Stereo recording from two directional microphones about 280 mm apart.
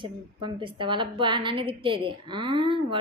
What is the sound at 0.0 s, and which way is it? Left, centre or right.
A woman's voice, centre.